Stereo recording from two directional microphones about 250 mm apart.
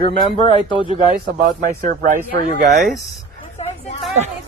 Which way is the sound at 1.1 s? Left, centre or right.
Right.